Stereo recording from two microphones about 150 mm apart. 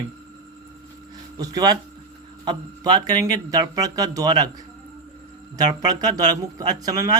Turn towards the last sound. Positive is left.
turn(degrees=-25)  # may be behind; listen again after turning